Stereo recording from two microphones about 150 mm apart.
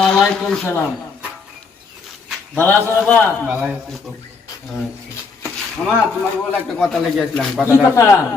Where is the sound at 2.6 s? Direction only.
15° left (ahead or behind).